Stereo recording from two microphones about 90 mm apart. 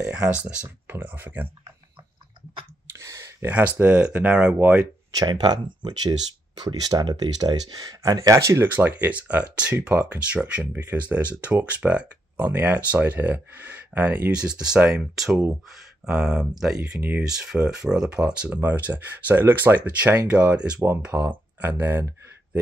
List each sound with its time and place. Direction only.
0.0 s speech: 10° right (ahead or behind)
0.9 s speech: 25° right (ahead or behind)
2.9 s a sound: 35° right (ahead or behind)
3.4 s speech: 20° right (ahead or behind)
5.1 s speech: 50° right (ahead or behind)
8.6 s speech: 20° right (ahead or behind)